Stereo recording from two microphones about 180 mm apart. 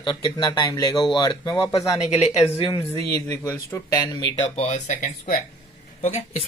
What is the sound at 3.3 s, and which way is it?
Speech, 15° left (ahead or behind).